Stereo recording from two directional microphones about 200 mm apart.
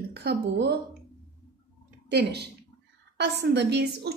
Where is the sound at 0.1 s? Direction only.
55° right (ahead or behind).